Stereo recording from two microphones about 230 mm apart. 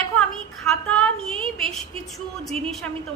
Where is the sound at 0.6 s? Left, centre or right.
Centre.